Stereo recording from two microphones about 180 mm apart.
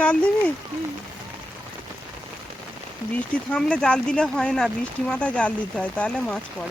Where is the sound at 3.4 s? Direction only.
5° left (ahead or behind).